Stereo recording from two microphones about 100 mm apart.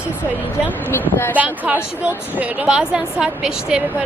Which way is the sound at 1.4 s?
15° right (ahead or behind).